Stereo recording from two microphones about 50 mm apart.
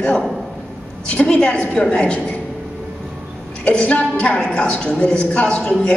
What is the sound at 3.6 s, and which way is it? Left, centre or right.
A woman's voice, left.